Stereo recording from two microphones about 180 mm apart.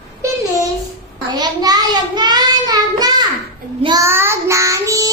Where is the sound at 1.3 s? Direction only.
20° right (ahead or behind).